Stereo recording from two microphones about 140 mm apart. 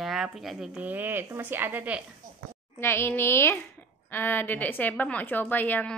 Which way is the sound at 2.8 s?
20° left (ahead or behind).